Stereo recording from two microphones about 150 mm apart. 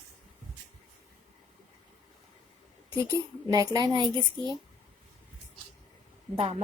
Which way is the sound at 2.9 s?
25° right (ahead or behind).